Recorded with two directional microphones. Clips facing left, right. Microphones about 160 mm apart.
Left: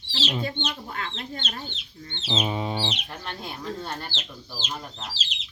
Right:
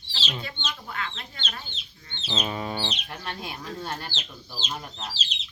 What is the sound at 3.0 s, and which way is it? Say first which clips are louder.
Speech: even; 5° right (ahead or behind).